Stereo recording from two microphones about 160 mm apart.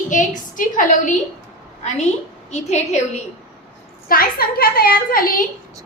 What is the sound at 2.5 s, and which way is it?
Speech, 45° left (ahead or behind).